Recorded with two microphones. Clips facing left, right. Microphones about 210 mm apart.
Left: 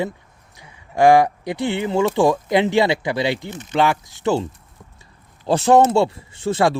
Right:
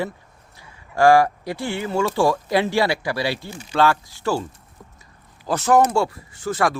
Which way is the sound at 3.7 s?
15° left (ahead or behind).